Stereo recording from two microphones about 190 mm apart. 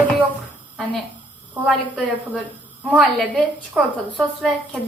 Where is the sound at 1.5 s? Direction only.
5° right (ahead or behind).